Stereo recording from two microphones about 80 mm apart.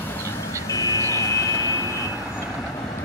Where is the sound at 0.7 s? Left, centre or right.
Left.